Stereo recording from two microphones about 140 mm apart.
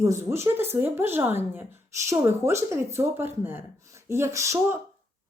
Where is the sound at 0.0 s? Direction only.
20° right (ahead or behind).